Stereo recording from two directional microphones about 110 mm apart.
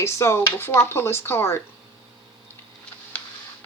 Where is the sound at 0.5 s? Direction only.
20° left (ahead or behind).